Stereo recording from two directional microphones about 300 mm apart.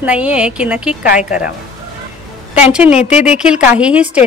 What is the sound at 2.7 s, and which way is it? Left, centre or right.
A woman's voice, centre.